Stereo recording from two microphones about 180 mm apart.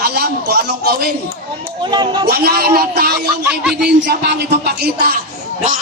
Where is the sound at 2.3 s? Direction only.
60° right (ahead or behind).